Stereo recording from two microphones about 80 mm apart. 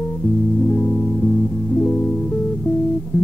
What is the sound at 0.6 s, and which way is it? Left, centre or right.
Music, centre.